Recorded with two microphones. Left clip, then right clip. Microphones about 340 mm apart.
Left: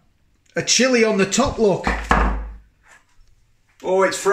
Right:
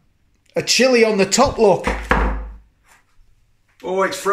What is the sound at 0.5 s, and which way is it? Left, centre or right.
Speech, centre.